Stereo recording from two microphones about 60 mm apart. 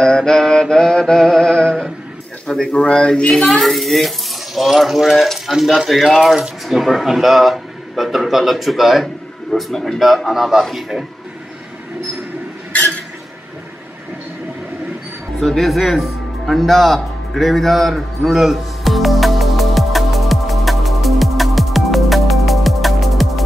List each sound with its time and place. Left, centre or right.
0.0 s mantra: centre
2.4 s a man's voice: centre
3.3 s a man's voice: centre
15.4 s music: centre